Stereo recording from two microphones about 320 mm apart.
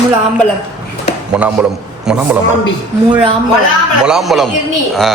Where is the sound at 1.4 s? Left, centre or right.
Centre.